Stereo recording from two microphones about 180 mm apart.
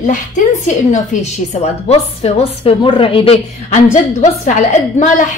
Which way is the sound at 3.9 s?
40° left (ahead or behind).